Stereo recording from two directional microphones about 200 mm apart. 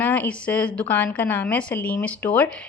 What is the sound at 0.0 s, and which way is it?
Speech, 10° left (ahead or behind).